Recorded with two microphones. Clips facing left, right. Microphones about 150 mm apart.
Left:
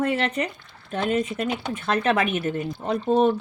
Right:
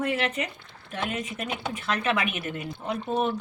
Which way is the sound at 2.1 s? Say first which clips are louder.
Left 6 dB; 40° left (ahead or behind).